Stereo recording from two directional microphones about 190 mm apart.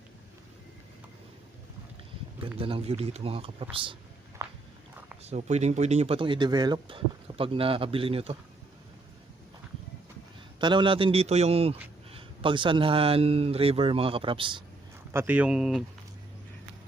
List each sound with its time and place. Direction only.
2.6 s speech: 30° right (ahead or behind)
4.4 s walk: 15° right (ahead or behind)
5.2 s speech: 35° right (ahead or behind)
10.6 s a man's voice: 25° right (ahead or behind)
15.1 s speech: 10° right (ahead or behind)